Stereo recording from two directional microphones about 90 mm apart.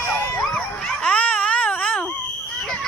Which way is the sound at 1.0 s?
15° left (ahead or behind).